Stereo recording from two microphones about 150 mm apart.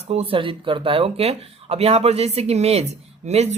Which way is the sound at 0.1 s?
40° right (ahead or behind).